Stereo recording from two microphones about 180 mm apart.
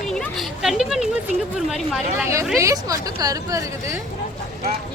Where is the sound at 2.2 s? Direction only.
15° right (ahead or behind).